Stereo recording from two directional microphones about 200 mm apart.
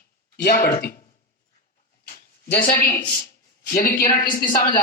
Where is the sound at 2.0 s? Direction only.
45° left (ahead or behind).